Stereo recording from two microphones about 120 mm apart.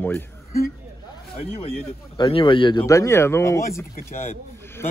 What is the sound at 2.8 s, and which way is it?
Speech, 25° left (ahead or behind).